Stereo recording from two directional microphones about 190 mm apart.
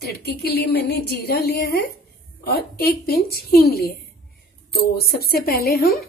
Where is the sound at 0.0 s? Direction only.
55° left (ahead or behind).